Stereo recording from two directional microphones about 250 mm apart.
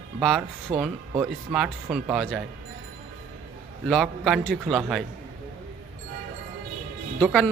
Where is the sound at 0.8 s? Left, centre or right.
Centre.